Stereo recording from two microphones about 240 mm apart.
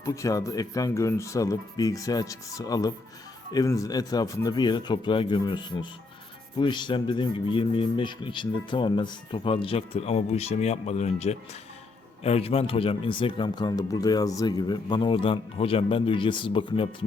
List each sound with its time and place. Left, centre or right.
0.0 s speech: centre